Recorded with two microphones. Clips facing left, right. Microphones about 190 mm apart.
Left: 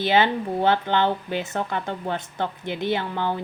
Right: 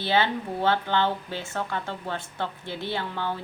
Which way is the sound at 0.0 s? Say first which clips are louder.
Left 4 dB; 20° left (ahead or behind).